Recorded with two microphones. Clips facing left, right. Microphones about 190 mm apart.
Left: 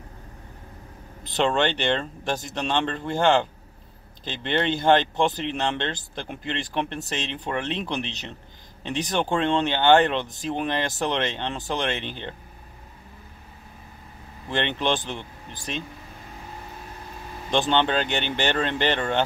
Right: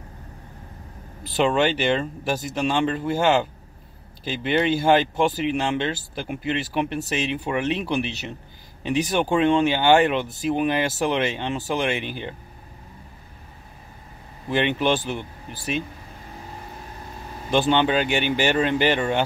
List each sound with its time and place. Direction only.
1.2 s speech: 5° right (ahead or behind)
14.5 s speech: 10° right (ahead or behind)
17.5 s speech: 10° right (ahead or behind)